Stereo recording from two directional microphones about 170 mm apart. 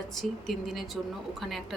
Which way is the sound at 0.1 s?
Centre (ahead or behind).